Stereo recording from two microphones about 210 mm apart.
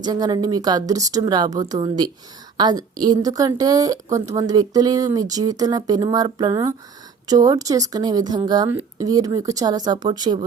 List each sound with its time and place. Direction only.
0.0 s a woman's voice: 20° right (ahead or behind)